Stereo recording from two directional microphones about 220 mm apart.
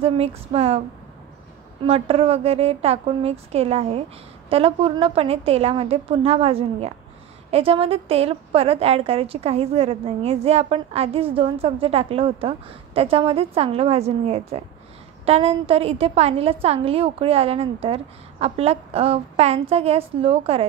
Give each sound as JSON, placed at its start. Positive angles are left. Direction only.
{"t": 0.0, "sound": "a woman's voice", "side_deg": -25}
{"t": 1.9, "sound": "a woman's voice", "side_deg": -25}